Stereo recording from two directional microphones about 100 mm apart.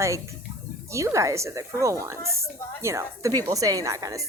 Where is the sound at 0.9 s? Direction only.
30° right (ahead or behind).